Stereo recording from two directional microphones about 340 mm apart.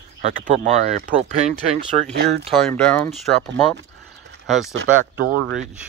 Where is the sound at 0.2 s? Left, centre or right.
Right.